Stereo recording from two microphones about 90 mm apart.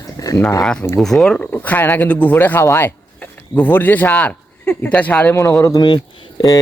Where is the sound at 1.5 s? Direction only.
20° left (ahead or behind).